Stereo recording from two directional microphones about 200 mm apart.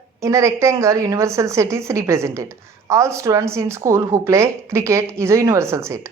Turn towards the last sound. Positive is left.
turn(degrees=-15)  # may be behind; listen again after turning